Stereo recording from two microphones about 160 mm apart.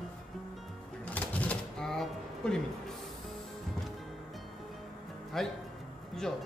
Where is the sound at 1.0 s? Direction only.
10° left (ahead or behind).